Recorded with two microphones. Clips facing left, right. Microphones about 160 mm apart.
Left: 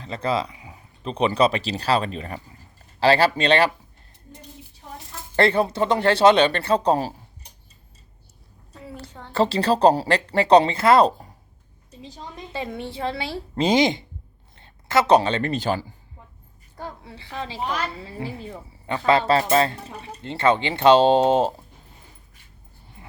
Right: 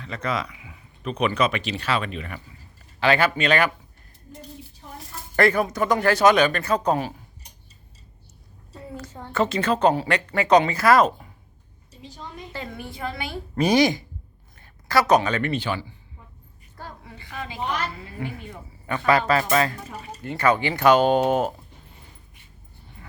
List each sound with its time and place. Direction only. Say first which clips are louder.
0.0 s speech: left 3 dB; 30° left (ahead or behind)
5.4 s a woman's voice: left 1 dB; 30° left (ahead or behind)
9.3 s speech: left 2 dB; 30° left (ahead or behind)
12.5 s a woman's voice: left 6 dB; 25° left (ahead or behind)
16.7 s a woman's voice: left 4 dB; 25° left (ahead or behind)